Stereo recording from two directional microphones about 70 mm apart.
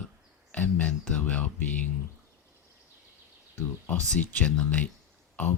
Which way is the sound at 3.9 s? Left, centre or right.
Centre.